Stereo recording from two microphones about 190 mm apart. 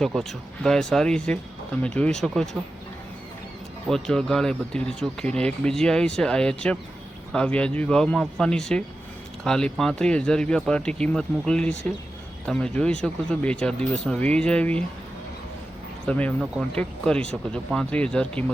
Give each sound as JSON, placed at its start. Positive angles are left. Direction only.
{"t": 0.0, "sound": "speech", "side_deg": 0}
{"t": 3.8, "sound": "speech", "side_deg": 5}
{"t": 16.0, "sound": "speech", "side_deg": 5}